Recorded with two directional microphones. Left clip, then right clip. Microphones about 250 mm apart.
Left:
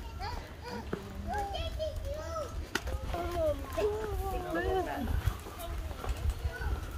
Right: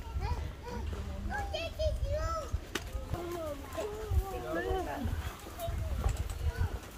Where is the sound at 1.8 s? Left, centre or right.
Right.